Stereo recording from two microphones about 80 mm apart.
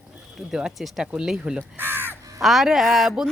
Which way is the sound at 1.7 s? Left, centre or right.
Right.